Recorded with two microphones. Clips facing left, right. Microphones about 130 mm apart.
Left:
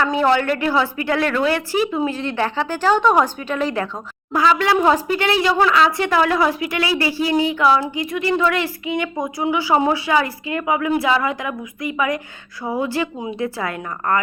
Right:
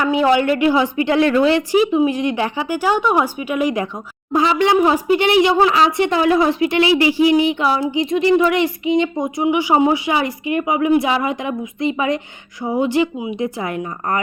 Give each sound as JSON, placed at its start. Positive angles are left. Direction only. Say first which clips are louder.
{"t": 0.0, "sound": "a woman's voice", "louder": "right 2 dB", "side_deg": -15}
{"t": 13.1, "sound": "a woman's voice", "louder": "right 2 dB", "side_deg": -10}
{"t": 13.6, "sound": "speech", "louder": "right 2 dB", "side_deg": -20}